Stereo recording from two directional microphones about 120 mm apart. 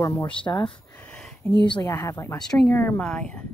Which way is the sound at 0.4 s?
40° left (ahead or behind).